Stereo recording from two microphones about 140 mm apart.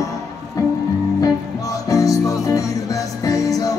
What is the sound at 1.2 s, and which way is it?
Music, 25° left (ahead or behind).